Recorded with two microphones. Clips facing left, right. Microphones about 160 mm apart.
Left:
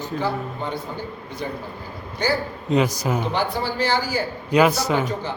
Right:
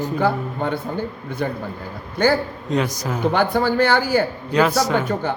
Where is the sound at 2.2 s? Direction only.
55° right (ahead or behind).